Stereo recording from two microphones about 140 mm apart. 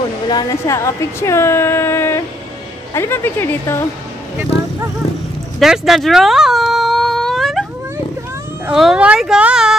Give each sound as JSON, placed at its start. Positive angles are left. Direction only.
{"t": 0.3, "sound": "a woman's voice", "side_deg": 25}
{"t": 5.6, "sound": "baby cry", "side_deg": 0}
{"t": 8.6, "sound": "speech", "side_deg": -5}